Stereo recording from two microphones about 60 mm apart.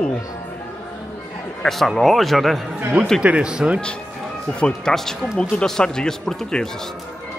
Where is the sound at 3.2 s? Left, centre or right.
Centre.